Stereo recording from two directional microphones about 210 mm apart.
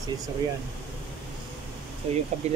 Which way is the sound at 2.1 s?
30° right (ahead or behind).